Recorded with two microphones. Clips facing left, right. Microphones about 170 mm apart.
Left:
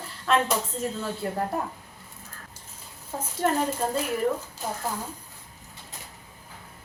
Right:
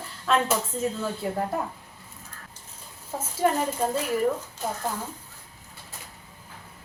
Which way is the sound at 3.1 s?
5° right (ahead or behind).